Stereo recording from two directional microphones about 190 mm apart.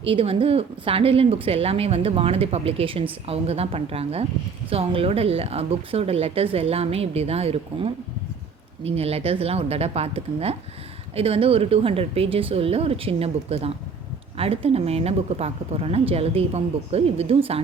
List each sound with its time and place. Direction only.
0.0 s speech: 30° right (ahead or behind)